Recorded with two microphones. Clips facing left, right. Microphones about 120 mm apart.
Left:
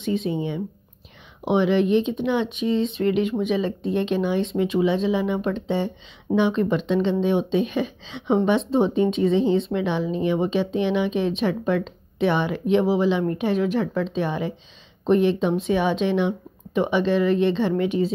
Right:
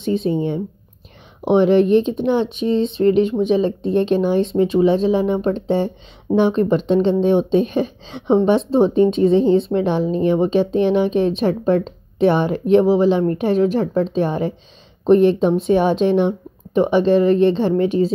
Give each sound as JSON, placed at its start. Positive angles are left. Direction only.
{"t": 0.0, "sound": "speech", "side_deg": -35}